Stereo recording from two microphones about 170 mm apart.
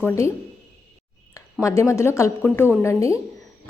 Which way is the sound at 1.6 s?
20° left (ahead or behind).